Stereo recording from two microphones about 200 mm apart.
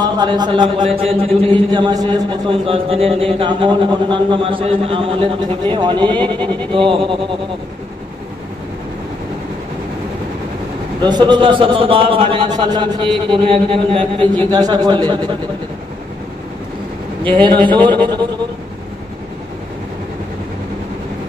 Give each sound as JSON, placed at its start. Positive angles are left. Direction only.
{"t": 0.0, "sound": "a man's voice", "side_deg": -20}
{"t": 11.0, "sound": "a man's voice", "side_deg": -20}
{"t": 17.4, "sound": "a man's voice", "side_deg": -25}